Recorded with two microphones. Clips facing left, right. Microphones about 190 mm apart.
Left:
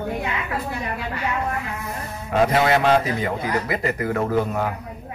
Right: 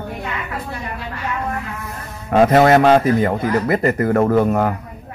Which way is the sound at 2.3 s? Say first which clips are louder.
Right 7 dB; 50° right (ahead or behind).